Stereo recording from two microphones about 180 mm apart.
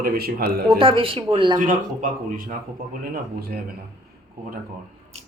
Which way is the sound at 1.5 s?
45° right (ahead or behind).